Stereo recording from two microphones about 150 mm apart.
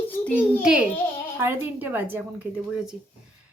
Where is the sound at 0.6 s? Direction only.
5° right (ahead or behind).